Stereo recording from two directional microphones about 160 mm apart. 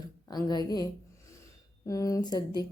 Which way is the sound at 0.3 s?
25° left (ahead or behind).